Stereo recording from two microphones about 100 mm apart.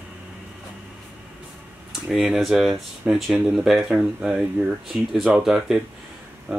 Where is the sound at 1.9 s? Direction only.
5° right (ahead or behind).